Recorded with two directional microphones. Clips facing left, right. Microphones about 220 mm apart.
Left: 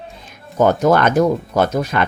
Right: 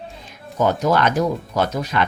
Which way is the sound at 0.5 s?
50° left (ahead or behind).